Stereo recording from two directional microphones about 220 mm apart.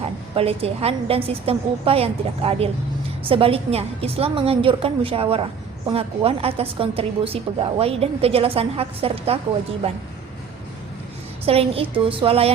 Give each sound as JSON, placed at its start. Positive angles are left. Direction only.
{"t": 0.0, "sound": "a woman's voice", "side_deg": -25}
{"t": 11.4, "sound": "a woman's voice", "side_deg": -25}